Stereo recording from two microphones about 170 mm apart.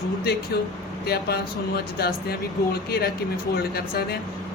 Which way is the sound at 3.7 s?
65° left (ahead or behind).